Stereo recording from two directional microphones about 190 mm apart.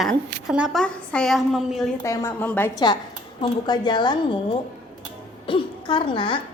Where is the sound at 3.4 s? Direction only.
25° left (ahead or behind).